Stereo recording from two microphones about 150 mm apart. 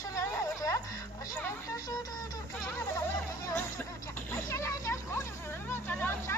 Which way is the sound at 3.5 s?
15° left (ahead or behind).